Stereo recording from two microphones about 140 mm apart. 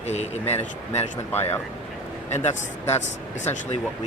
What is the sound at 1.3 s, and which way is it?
Speech, 15° left (ahead or behind).